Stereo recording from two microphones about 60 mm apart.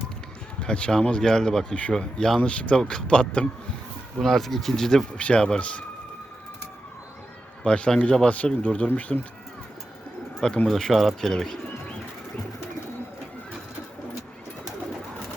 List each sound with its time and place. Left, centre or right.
0.6 s speech: centre
4.2 s speech: centre
7.6 s speech: centre
10.7 s speech: centre